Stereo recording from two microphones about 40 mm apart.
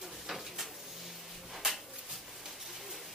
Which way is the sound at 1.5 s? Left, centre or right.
Centre.